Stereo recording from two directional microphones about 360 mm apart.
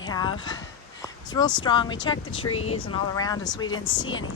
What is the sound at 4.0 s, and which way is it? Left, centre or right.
Speech, left.